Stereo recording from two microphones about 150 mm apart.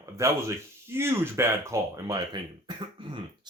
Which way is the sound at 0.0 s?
20° right (ahead or behind).